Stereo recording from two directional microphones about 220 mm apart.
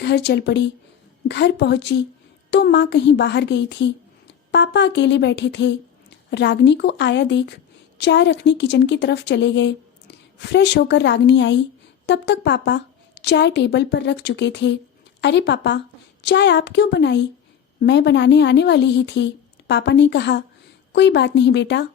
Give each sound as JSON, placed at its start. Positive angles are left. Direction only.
{"t": 0.0, "sound": "a woman's voice", "side_deg": 50}